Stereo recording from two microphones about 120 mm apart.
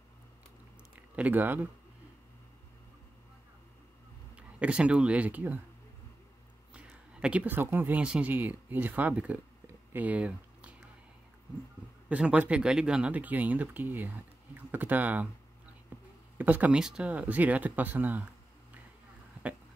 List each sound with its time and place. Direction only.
1.1 s speech: 15° right (ahead or behind)
4.4 s speech: 10° right (ahead or behind)
6.7 s speech: 10° right (ahead or behind)
9.9 s typing: 10° right (ahead or behind)
12.1 s speech: 10° right (ahead or behind)
15.9 s a sound: 15° right (ahead or behind)
16.3 s speech: 15° right (ahead or behind)